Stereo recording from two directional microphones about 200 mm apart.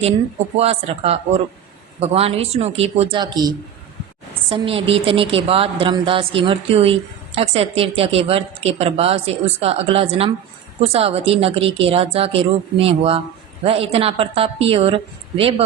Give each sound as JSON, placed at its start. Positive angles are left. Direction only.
{"t": 0.5, "sound": "speech", "side_deg": -30}